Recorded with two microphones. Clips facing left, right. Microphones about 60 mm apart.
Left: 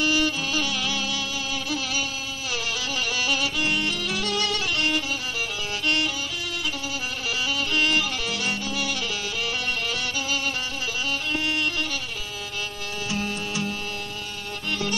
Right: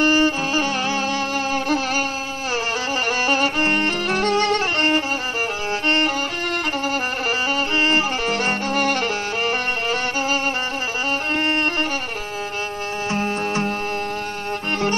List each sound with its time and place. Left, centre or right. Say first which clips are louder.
0.0 s music: right 6 dB; right
3.3 s music: right 7 dB; right
7.2 s music: right 3 dB; right
13.1 s music: right 7 dB; right